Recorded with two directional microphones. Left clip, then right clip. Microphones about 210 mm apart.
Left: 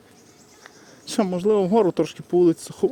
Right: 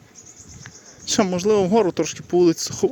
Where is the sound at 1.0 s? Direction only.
Centre (ahead or behind).